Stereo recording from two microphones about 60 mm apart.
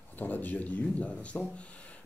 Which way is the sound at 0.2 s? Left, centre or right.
Left.